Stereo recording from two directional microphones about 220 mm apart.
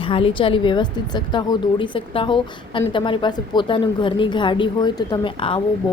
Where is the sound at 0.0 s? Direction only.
25° left (ahead or behind).